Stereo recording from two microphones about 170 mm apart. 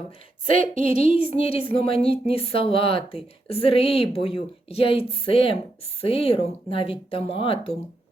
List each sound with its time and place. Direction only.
0.5 s speech: 35° left (ahead or behind)